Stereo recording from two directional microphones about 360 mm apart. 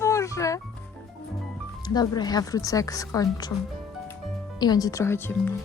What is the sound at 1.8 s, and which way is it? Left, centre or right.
A woman's voice, centre.